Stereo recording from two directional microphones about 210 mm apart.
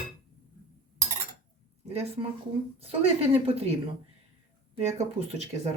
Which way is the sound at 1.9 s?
30° right (ahead or behind).